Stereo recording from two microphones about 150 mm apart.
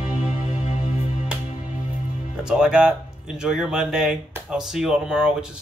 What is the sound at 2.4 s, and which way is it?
Speech, 5° right (ahead or behind).